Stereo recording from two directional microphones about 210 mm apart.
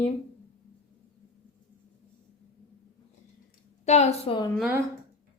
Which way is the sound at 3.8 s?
30° left (ahead or behind).